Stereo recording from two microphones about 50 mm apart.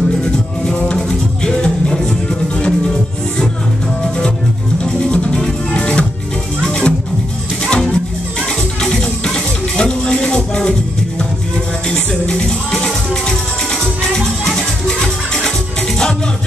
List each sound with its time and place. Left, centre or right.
0.9 s music: centre
5.1 s music: centre
11.9 s music: centre
14.4 s music: centre